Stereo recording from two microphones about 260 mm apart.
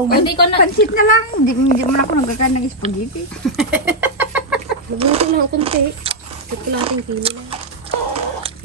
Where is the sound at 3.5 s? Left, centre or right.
Centre.